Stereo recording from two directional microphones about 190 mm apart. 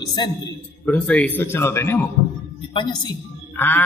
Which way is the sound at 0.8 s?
5° left (ahead or behind).